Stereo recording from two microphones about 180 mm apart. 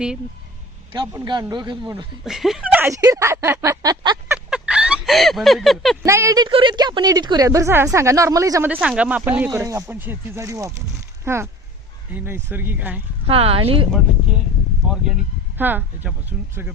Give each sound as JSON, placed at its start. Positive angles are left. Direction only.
{"t": 0.9, "sound": "speech", "side_deg": -20}
{"t": 2.2, "sound": "speech", "side_deg": 0}
{"t": 4.4, "sound": "a sound", "side_deg": -5}
{"t": 6.0, "sound": "speech", "side_deg": -15}
{"t": 13.2, "sound": "speech", "side_deg": -35}
{"t": 14.8, "sound": "speech", "side_deg": 0}